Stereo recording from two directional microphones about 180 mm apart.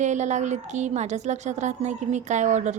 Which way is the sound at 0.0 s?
40° right (ahead or behind).